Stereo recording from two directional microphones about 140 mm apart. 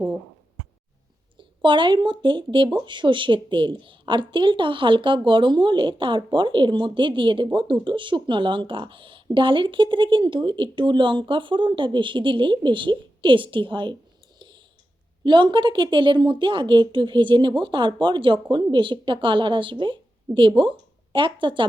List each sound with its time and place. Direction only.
1.4 s a woman's voice: 35° right (ahead or behind)
14.3 s a sound: 35° right (ahead or behind)
15.2 s a woman's voice: 35° right (ahead or behind)